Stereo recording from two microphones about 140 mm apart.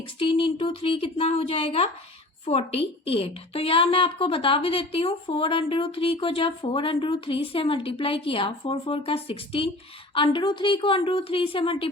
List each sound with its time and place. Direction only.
0.2 s speech: 40° left (ahead or behind)